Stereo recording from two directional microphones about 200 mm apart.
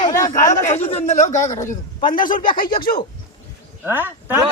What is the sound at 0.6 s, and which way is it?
Speech, 30° left (ahead or behind).